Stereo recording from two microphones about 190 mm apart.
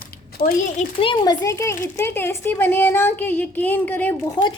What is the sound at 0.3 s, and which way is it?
Speech, 50° left (ahead or behind).